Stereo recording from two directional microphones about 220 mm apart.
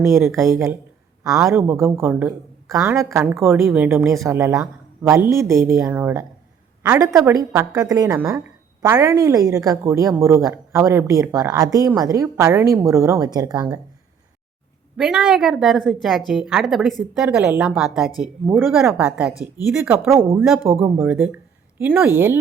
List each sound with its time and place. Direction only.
0.0 s a woman's voice: 15° right (ahead or behind)
14.9 s a woman's voice: centre (ahead or behind)
19.3 s speech: 15° left (ahead or behind)
19.7 s a woman's voice: 5° right (ahead or behind)
20.4 s a woman's voice: centre (ahead or behind)